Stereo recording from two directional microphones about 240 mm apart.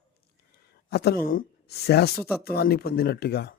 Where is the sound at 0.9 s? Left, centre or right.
Left.